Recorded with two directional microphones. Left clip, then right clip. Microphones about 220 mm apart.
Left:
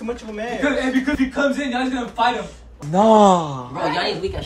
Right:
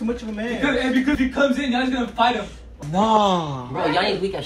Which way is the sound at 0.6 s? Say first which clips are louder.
Even; 45° left (ahead or behind).